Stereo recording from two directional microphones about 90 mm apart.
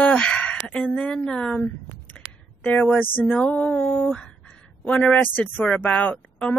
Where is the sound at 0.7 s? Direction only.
15° left (ahead or behind).